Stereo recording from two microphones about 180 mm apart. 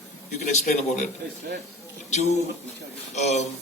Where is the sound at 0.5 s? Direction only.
40° left (ahead or behind).